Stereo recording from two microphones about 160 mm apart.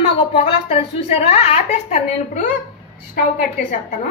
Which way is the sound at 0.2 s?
35° left (ahead or behind).